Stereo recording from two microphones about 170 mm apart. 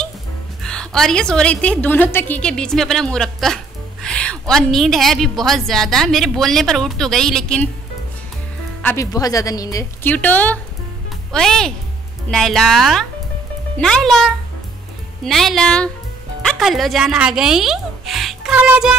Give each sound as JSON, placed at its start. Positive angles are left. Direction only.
{"t": 0.6, "sound": "a woman's voice", "side_deg": 5}
{"t": 8.8, "sound": "a woman's voice", "side_deg": 20}